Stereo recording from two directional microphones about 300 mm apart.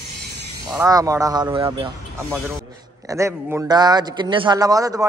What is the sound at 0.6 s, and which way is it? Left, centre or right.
A man's voice, centre.